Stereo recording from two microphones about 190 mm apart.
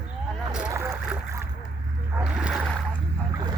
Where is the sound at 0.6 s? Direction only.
15° right (ahead or behind).